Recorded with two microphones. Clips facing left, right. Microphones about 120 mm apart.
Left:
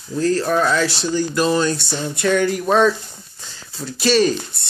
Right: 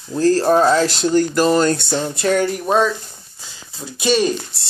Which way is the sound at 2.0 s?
35° right (ahead or behind).